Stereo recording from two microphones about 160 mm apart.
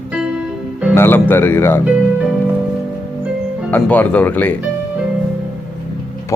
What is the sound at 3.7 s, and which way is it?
Speech, 10° left (ahead or behind).